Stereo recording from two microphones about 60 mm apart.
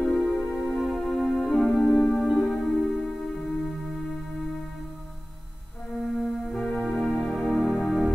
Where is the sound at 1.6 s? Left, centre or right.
Centre.